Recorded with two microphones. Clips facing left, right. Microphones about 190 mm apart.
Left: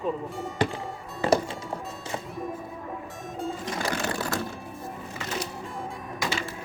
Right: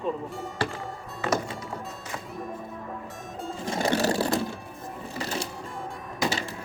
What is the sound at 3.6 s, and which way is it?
Music, 30° right (ahead or behind).